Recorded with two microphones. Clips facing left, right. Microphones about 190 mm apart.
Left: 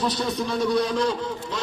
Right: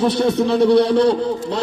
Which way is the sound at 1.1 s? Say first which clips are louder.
Right 9 dB; 65° right (ahead or behind).